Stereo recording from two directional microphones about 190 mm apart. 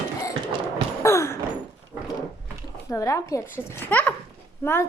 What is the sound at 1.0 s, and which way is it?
Sigh, 15° left (ahead or behind).